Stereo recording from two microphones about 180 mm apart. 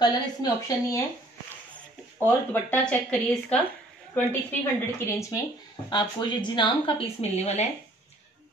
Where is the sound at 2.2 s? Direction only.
10° left (ahead or behind).